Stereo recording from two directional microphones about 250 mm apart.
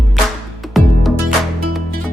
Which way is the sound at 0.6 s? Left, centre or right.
Centre.